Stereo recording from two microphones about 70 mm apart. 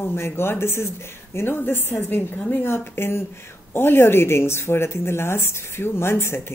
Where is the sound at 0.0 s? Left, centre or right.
Left.